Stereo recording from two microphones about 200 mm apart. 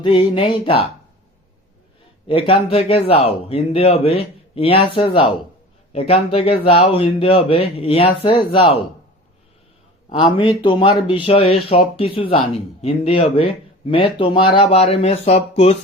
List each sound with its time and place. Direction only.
0.0 s speech: 25° left (ahead or behind)
2.5 s speech: 30° left (ahead or behind)
10.1 s speech: 25° left (ahead or behind)